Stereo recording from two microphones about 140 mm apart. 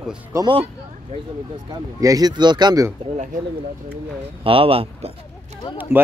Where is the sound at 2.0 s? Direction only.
25° right (ahead or behind).